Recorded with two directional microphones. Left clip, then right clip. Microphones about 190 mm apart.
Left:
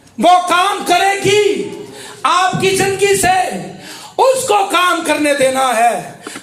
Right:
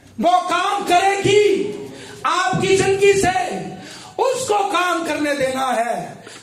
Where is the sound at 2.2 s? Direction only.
20° left (ahead or behind).